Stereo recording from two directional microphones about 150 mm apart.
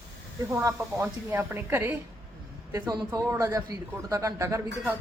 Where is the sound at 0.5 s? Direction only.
20° right (ahead or behind).